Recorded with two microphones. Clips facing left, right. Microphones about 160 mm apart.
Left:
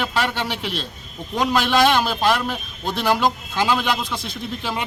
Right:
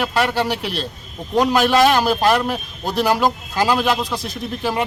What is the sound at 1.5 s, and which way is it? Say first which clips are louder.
A man's voice: right 2 dB; 5° right (ahead or behind).